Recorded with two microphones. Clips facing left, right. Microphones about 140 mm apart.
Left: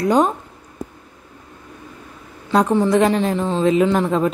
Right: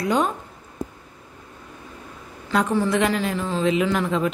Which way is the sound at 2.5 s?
35° left (ahead or behind).